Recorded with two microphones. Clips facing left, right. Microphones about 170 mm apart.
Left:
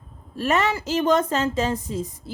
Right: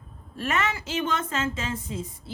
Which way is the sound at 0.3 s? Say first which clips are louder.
Left 6 dB; 35° left (ahead or behind).